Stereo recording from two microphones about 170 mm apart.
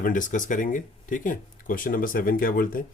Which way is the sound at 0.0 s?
50° left (ahead or behind).